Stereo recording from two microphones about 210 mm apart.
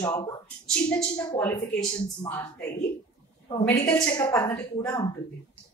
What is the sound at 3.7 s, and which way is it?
Speech, 15° left (ahead or behind).